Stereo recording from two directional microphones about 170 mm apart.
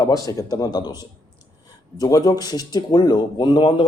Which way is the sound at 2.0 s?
20° left (ahead or behind).